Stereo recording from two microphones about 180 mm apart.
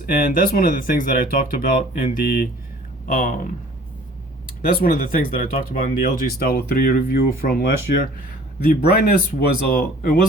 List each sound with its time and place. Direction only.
0.0 s speech: 50° left (ahead or behind)
3.1 s speech: 50° left (ahead or behind)
4.6 s speech: 50° left (ahead or behind)